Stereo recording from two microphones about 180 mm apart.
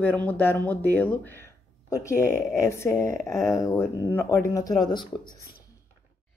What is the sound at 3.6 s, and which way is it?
Speech, 15° left (ahead or behind).